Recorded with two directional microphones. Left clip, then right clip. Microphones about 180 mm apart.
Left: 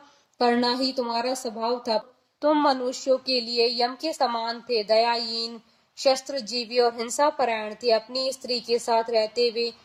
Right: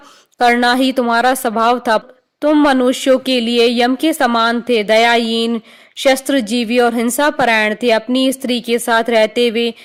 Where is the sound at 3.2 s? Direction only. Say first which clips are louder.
Right 10 dB; 90° right.